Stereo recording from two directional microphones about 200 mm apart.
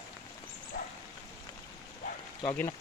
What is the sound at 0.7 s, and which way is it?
Bow-wow, 45° left (ahead or behind).